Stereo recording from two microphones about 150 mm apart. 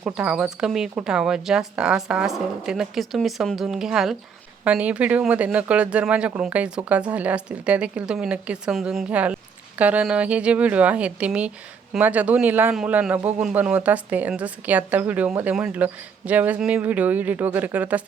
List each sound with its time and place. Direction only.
0.0 s speech: 10° right (ahead or behind)